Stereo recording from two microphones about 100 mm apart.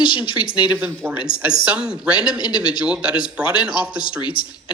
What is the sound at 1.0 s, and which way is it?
Speech, 15° right (ahead or behind).